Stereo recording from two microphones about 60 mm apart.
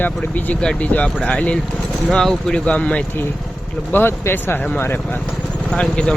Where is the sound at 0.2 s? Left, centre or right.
Left.